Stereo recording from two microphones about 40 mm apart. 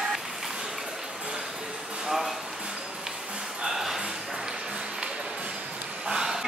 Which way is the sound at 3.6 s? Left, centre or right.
Centre.